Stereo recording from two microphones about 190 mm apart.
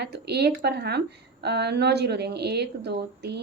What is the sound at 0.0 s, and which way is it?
Speech, 60° right (ahead or behind).